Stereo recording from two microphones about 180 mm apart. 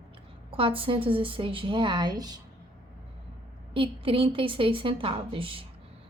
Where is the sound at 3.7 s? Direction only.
30° right (ahead or behind).